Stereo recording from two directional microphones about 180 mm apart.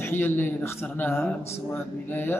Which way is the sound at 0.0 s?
10° left (ahead or behind).